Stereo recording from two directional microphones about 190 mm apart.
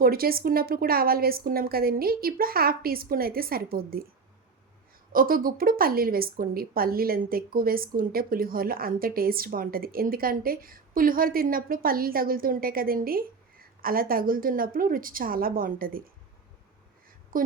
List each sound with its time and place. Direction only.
0.0 s a woman's voice: 50° right (ahead or behind)
5.1 s a woman's voice: 50° right (ahead or behind)
17.3 s a woman's voice: 45° right (ahead or behind)